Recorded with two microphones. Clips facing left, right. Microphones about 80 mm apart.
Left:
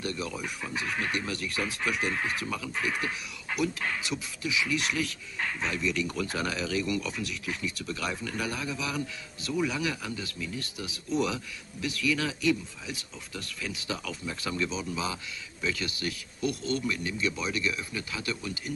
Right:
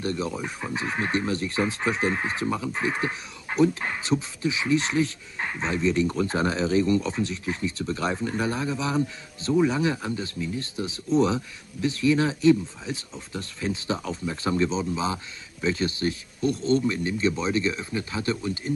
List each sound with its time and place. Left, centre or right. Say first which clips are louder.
0.0 s speech: right 5 dB; right